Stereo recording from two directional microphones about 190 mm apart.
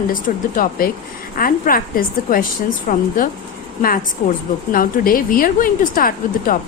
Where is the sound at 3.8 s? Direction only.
45° left (ahead or behind).